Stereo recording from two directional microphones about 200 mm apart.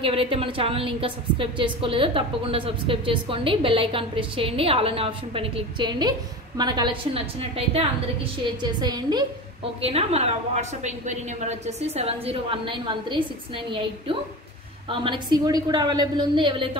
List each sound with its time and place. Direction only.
0.0 s a woman's voice: 25° right (ahead or behind)
9.8 s a woman's voice: 30° right (ahead or behind)